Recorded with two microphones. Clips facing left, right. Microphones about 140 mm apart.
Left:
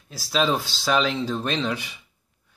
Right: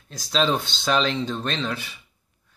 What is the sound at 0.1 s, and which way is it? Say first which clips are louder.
Speech: even; 5° left (ahead or behind).